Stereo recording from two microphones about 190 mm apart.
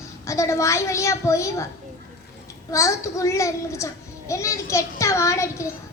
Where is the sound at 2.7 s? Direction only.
15° left (ahead or behind).